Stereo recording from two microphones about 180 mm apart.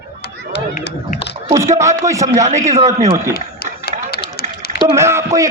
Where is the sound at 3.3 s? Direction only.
60° left (ahead or behind).